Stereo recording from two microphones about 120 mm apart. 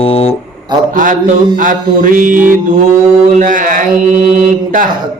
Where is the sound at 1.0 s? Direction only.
90° right.